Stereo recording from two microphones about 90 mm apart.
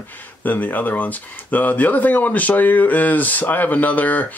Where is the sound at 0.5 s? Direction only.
20° left (ahead or behind).